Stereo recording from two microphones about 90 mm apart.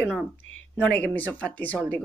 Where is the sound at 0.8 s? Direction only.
15° left (ahead or behind).